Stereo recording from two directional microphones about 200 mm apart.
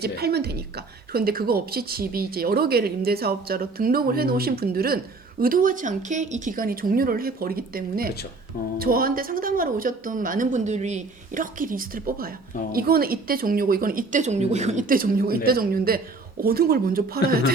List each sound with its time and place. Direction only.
0.0 s a woman's voice: 50° right (ahead or behind)